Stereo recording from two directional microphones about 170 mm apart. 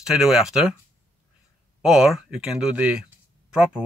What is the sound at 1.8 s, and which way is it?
Speech, 5° right (ahead or behind).